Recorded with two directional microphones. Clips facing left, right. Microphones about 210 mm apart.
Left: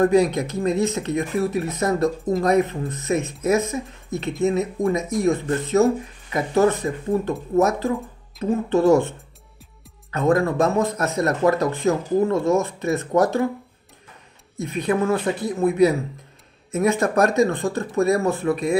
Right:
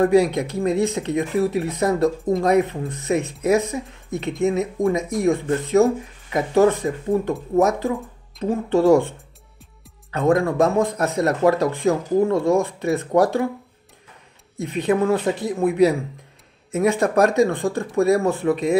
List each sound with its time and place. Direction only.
0.0 s speech: 15° right (ahead or behind)
10.1 s speech: 15° right (ahead or behind)
14.6 s speech: 15° right (ahead or behind)